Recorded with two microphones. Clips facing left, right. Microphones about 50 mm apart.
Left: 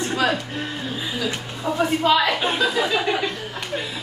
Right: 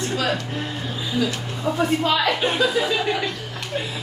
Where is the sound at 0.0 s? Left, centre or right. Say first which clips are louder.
Left 2 dB; centre.